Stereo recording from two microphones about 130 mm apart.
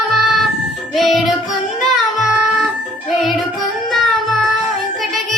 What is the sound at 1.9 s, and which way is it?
Child singing, centre (ahead or behind).